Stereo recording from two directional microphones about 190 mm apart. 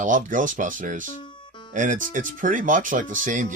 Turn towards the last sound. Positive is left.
turn(degrees=-45)  # may be behind; listen again after turning